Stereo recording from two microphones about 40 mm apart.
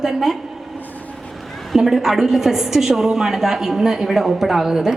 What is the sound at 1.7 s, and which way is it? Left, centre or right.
A woman's voice, centre.